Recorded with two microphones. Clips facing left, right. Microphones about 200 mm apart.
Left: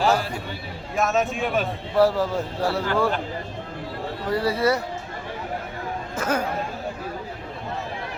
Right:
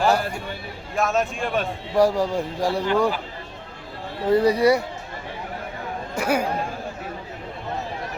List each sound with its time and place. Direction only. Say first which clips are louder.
0.9 s speech: even; centre (ahead or behind)
2.0 s speech: right 1 dB; 15° right (ahead or behind)
4.3 s speech: right 5 dB; 20° right (ahead or behind)
6.1 s speech: right 3 dB; 10° right (ahead or behind)